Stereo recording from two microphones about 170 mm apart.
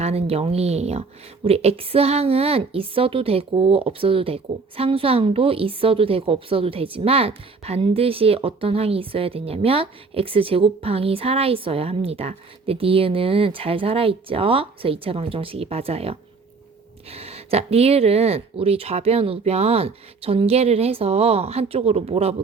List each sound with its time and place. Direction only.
0.0 s a woman's voice: 35° right (ahead or behind)